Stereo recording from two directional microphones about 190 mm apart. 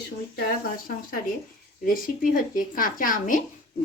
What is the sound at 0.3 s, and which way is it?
A woman's voice, 50° left (ahead or behind).